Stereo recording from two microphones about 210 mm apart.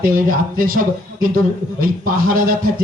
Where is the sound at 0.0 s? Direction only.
40° right (ahead or behind).